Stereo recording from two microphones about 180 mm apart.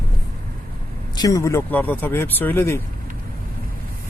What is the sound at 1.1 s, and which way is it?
Speech, 20° left (ahead or behind).